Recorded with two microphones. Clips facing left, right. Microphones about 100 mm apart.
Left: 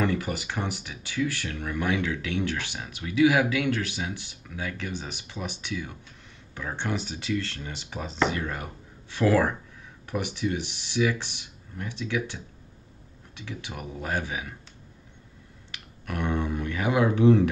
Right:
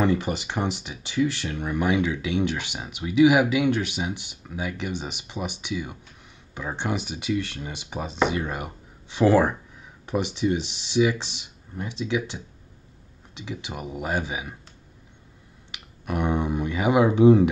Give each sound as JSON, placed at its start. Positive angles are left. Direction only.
{"t": 0.0, "sound": "speech", "side_deg": -20}
{"t": 13.3, "sound": "speech", "side_deg": -20}
{"t": 15.7, "sound": "speech", "side_deg": -15}